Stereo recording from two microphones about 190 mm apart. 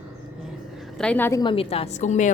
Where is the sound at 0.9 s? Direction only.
5° left (ahead or behind); by 2.3 s 40° left (ahead or behind).